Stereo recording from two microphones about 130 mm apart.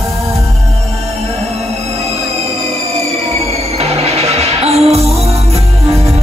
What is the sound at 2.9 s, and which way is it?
Music, 55° right (ahead or behind).